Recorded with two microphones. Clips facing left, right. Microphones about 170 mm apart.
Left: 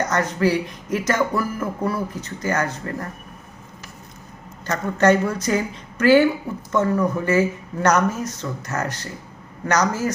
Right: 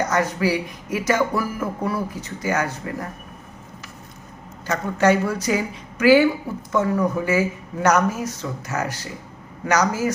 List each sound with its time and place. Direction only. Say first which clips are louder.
0.0 s speech: left 1 dB; 10° right (ahead or behind)
4.6 s speech: left 1 dB; 10° right (ahead or behind)